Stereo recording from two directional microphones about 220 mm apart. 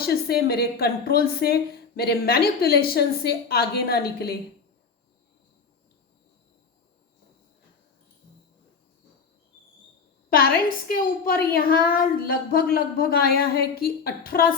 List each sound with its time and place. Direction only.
0.0 s a woman's voice: 45° left (ahead or behind)
10.8 s a woman's voice: 40° left (ahead or behind)